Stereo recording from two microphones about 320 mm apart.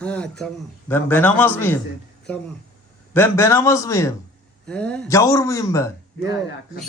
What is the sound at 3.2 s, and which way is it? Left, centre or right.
A man's voice, centre.